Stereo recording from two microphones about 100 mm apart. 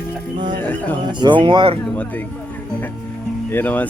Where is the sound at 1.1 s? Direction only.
50° right (ahead or behind).